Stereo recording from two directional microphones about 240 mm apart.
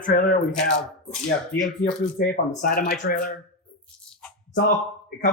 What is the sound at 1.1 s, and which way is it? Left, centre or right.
Speech, centre.